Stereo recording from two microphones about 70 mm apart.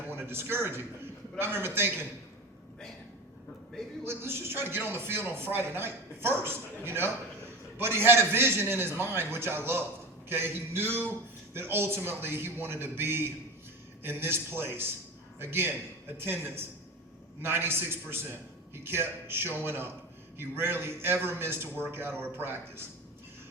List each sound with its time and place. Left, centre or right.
0.1 s a man's voice: right
4.0 s speech: right
17.4 s speech: right